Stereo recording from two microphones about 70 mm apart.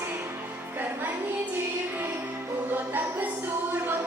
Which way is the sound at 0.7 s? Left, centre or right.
Right.